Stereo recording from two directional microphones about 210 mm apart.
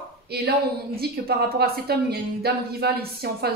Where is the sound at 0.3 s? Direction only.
50° right (ahead or behind).